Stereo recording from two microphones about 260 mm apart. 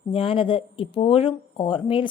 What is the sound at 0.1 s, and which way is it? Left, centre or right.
A woman's voice, left.